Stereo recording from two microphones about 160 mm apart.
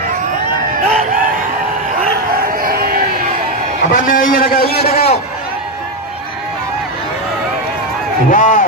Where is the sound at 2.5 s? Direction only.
65° right (ahead or behind).